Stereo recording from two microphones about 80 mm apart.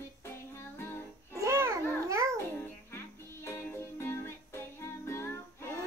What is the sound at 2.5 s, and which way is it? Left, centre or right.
Music, left.